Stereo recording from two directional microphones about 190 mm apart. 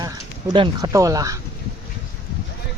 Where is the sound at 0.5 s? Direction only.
20° right (ahead or behind).